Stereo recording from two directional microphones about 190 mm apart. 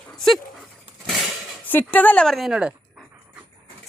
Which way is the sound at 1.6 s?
10° left (ahead or behind).